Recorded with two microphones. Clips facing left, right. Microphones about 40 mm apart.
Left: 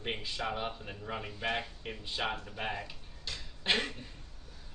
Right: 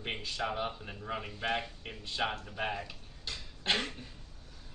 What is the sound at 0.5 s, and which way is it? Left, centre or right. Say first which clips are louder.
Speech: right 1 dB; centre.